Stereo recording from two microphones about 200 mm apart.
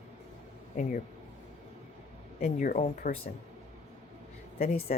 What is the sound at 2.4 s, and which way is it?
Speech, 40° left (ahead or behind).